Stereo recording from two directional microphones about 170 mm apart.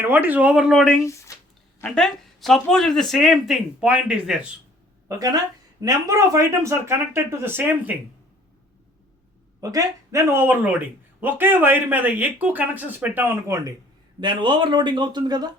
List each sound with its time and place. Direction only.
0.0 s speech: 10° right (ahead or behind)
1.3 s a sound: 20° left (ahead or behind)
1.8 s speech: centre (ahead or behind)
5.0 s speech: 20° right (ahead or behind)
9.6 s speech: 20° right (ahead or behind)